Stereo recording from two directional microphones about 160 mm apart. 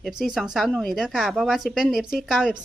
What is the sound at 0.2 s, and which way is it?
Speech, centre (ahead or behind).